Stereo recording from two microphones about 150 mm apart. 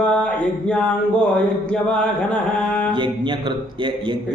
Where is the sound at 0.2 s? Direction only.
5° left (ahead or behind).